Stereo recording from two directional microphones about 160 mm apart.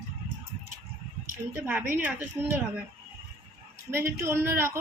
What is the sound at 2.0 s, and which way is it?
Speech, 15° right (ahead or behind).